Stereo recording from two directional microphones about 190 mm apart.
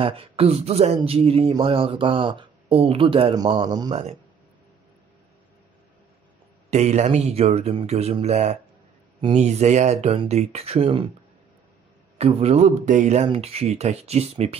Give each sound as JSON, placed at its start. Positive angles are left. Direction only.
{"t": 0.0, "sound": "speech", "side_deg": -30}
{"t": 6.7, "sound": "speech", "side_deg": -35}
{"t": 12.2, "sound": "speech", "side_deg": -30}